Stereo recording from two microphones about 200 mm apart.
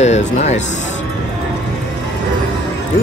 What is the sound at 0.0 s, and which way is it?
Mantra, 35° left (ahead or behind).